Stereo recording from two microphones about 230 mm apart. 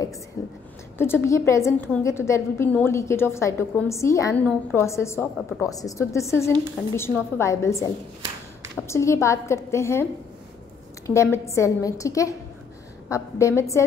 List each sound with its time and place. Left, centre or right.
0.4 s a sound: centre
0.9 s a woman's voice: centre
11.1 s a woman's voice: centre